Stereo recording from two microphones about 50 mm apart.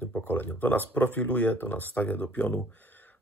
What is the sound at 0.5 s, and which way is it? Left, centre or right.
Speech, left.